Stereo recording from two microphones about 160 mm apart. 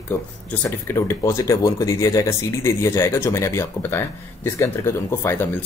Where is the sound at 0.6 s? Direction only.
15° left (ahead or behind).